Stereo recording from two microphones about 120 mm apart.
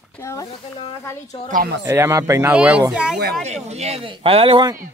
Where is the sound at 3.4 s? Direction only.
70° right (ahead or behind); by 4.7 s 45° right (ahead or behind).